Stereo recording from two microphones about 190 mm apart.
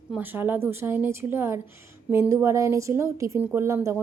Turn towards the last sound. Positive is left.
turn(degrees=-15)  # may be behind; listen again after turning